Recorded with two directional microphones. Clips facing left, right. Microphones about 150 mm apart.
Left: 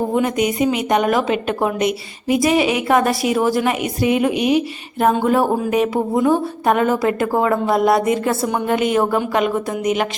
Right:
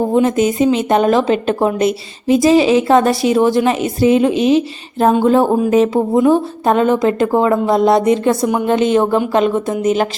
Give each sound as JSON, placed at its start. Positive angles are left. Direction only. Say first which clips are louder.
{"t": 0.1, "sound": "a woman's voice", "louder": "right 5 dB", "side_deg": -25}